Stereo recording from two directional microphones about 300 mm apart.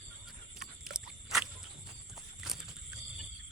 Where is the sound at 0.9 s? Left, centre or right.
Right.